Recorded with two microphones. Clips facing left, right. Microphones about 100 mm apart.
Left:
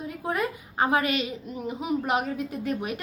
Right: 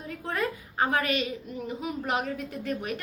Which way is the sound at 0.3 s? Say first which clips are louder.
Left 2 dB; 15° left (ahead or behind).